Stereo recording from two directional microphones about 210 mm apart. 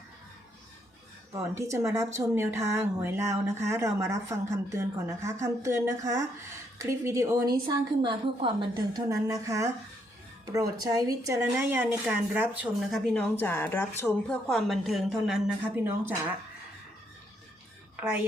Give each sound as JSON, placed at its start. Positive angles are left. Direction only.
{"t": 1.3, "sound": "speech", "side_deg": -15}
{"t": 13.1, "sound": "a woman's voice", "side_deg": 10}
{"t": 17.9, "sound": "whispering", "side_deg": -10}